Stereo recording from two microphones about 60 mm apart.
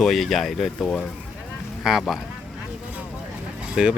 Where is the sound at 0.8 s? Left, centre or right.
Centre.